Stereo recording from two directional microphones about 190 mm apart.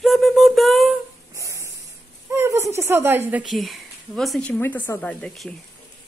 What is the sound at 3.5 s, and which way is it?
A woman's voice, centre (ahead or behind).